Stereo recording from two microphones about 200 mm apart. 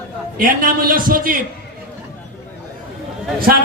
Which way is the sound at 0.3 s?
45° right (ahead or behind).